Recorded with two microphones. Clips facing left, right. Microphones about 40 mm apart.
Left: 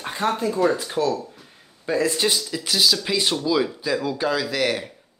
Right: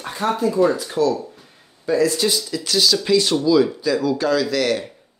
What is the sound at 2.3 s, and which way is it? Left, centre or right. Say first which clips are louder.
Speech: right 2 dB; centre.